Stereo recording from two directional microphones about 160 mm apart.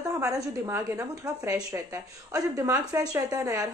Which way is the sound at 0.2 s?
20° right (ahead or behind).